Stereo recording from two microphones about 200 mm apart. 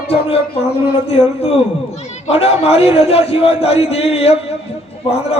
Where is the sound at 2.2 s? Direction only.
30° left (ahead or behind).